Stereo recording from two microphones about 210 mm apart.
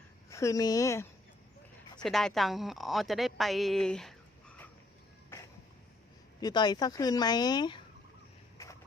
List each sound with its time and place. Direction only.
0.3 s speech: 15° left (ahead or behind)
2.0 s a woman's voice: centre (ahead or behind)
5.3 s a sound: 10° left (ahead or behind)
6.4 s a woman's voice: 20° left (ahead or behind)